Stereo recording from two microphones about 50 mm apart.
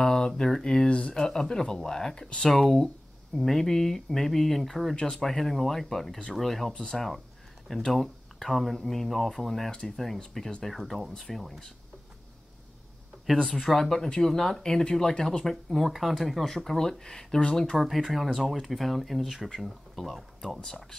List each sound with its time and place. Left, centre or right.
0.0 s mantra: centre
0.4 s speech: centre
0.8 s speech: left
2.5 s speech: centre
6.7 s speech: centre
7.6 s speech: centre
9.7 s speech: centre
9.9 s speech: centre
13.4 s speech: centre
15.7 s speech: centre
17.7 s speech: centre